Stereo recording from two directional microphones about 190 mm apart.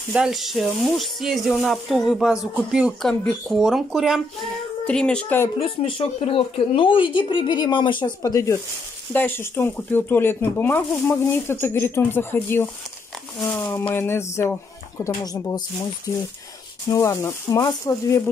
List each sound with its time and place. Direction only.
0.1 s speech: centre (ahead or behind)
5.6 s speech: 30° left (ahead or behind)
16.9 s speech: 15° left (ahead or behind)